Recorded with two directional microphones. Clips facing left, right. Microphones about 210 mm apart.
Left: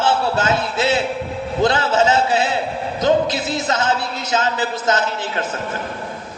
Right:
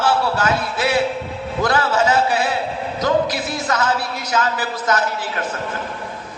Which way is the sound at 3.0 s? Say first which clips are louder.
Left 2 dB; 25° left (ahead or behind).